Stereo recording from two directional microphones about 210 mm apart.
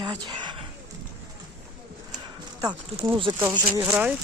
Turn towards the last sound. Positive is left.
turn(degrees=-10)  # may be behind; listen again after turning